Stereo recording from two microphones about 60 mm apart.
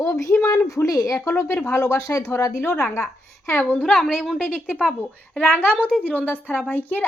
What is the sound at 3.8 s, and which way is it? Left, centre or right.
Speech, centre.